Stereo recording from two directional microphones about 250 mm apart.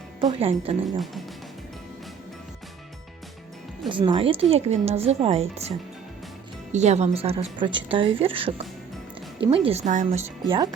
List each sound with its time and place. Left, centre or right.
0.2 s a woman's voice: right
0.9 s speech: centre
3.8 s a woman's voice: centre
6.7 s a woman's voice: right